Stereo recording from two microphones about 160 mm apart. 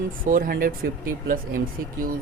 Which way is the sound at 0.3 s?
60° right (ahead or behind).